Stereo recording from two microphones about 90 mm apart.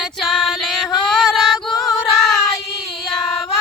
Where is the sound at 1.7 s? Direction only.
40° left (ahead or behind).